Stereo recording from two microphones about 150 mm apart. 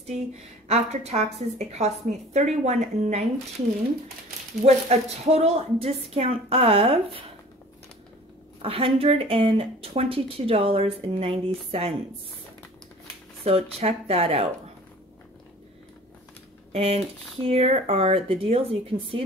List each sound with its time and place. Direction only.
0.7 s a woman's voice: 45° right (ahead or behind)
4.6 s speech: 45° right (ahead or behind)
8.6 s speech: 40° right (ahead or behind)
13.4 s speech: 40° right (ahead or behind)
16.7 s speech: 40° right (ahead or behind)